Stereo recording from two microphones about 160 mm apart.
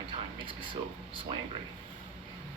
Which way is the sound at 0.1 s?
30° right (ahead or behind).